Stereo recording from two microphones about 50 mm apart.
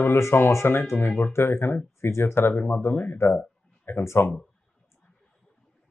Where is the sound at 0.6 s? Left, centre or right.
Left.